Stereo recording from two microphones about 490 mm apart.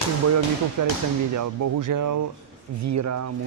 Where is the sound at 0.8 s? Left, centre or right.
Right.